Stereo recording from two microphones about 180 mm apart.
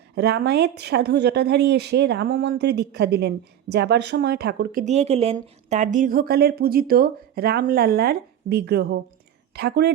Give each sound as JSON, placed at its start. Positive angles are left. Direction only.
{"t": 0.2, "sound": "a woman's voice", "side_deg": -65}